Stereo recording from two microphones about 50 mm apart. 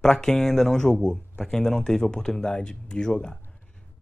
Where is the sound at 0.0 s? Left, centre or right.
Centre.